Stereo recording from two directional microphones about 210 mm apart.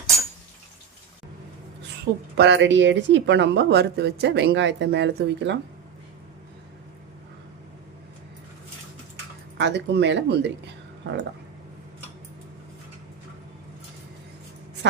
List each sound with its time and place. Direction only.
2.3 s speech: 55° right (ahead or behind)
9.6 s speech: 55° right (ahead or behind)